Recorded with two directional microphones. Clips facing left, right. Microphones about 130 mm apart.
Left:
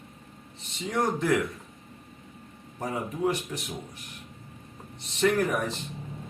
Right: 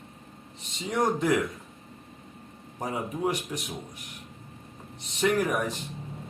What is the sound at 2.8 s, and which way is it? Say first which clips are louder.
Speech: left 1 dB; 15° right (ahead or behind).